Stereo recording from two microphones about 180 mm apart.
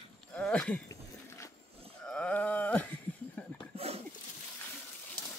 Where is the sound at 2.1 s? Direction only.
5° left (ahead or behind).